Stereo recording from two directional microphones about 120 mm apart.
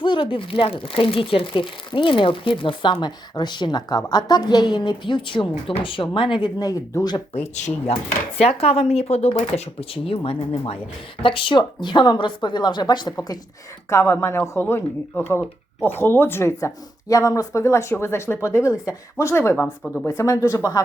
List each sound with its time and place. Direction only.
0.0 s speech: 45° left (ahead or behind)
7.3 s a woman's voice: 60° left (ahead or behind); by 13.4 s 30° left (ahead or behind)
13.9 s speech: 20° left (ahead or behind)
19.8 s speech: 5° left (ahead or behind)
20.1 s speech: 25° left (ahead or behind)